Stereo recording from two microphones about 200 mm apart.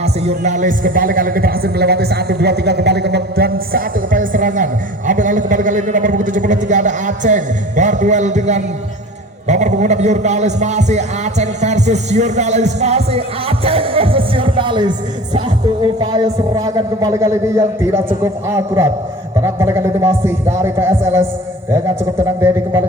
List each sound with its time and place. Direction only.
0.0 s speech: 35° right (ahead or behind); by 21.2 s 10° right (ahead or behind)
22.4 s speech: 10° right (ahead or behind)